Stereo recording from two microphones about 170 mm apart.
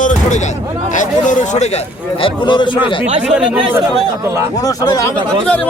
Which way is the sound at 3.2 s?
5° right (ahead or behind).